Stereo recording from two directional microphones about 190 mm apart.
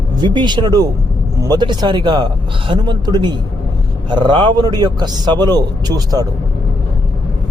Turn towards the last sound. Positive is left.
turn(degrees=-20)  # may be behind; listen again after turning